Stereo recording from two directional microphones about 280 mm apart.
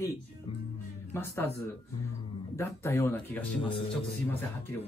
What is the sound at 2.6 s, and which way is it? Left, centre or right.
Speech, centre.